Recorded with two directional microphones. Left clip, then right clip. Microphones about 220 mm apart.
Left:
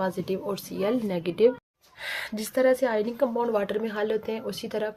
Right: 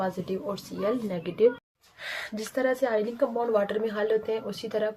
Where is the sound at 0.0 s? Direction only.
30° left (ahead or behind).